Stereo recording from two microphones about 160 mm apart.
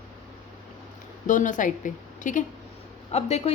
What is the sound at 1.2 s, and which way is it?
A woman's voice, 50° left (ahead or behind).